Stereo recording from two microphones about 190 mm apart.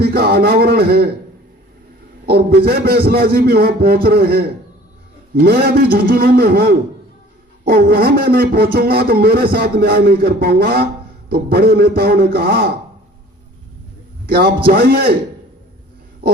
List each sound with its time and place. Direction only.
0.0 s a man's voice: 55° right (ahead or behind)
2.2 s a man's voice: 55° right (ahead or behind)
14.3 s a man's voice: 55° right (ahead or behind)